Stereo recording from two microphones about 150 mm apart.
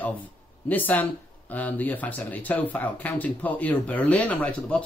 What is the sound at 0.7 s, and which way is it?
Speech, 10° left (ahead or behind).